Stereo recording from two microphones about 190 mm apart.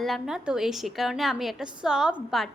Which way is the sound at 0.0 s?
Centre (ahead or behind).